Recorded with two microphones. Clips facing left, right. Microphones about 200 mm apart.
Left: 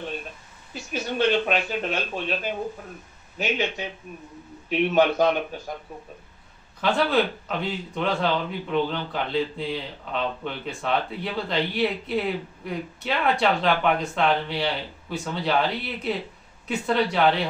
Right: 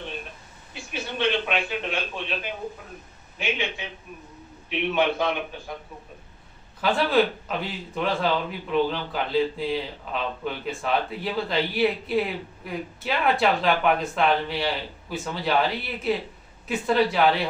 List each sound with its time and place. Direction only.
1.1 s speech: 40° left (ahead or behind)
3.3 s speech: 40° left (ahead or behind)
6.8 s speech: centre (ahead or behind)